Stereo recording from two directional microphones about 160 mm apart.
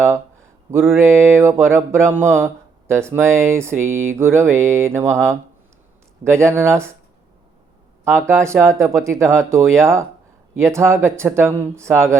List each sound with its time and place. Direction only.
0.7 s speech: 15° right (ahead or behind)
8.1 s speech: 15° right (ahead or behind)